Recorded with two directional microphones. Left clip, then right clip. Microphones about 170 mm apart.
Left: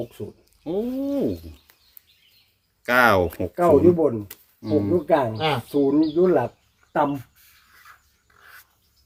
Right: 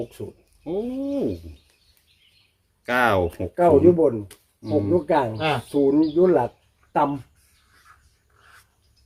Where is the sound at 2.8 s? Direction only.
15° left (ahead or behind).